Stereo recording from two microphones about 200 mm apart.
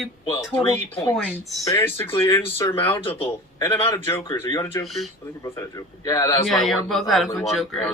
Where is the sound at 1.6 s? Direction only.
15° left (ahead or behind).